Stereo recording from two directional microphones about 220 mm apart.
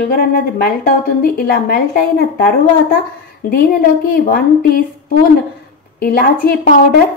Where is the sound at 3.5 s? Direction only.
45° left (ahead or behind).